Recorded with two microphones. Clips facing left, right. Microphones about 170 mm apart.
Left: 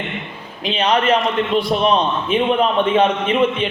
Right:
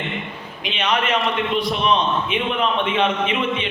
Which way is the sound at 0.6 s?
35° left (ahead or behind).